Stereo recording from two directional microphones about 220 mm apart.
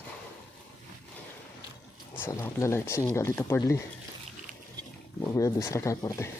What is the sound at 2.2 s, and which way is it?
Speech, 10° left (ahead or behind).